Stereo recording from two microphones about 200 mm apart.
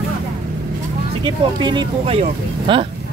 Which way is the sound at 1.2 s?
20° right (ahead or behind).